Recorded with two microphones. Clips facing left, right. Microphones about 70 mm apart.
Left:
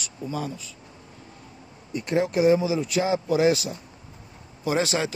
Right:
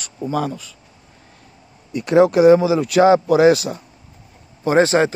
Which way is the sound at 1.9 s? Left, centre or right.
Right.